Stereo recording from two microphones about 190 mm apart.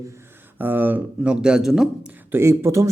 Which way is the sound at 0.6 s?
10° right (ahead or behind).